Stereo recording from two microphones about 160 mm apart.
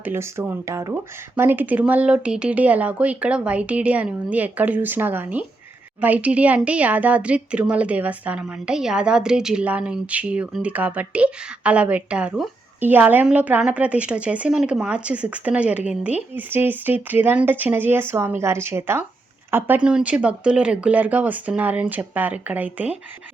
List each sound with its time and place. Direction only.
0.0 s speech: 15° right (ahead or behind)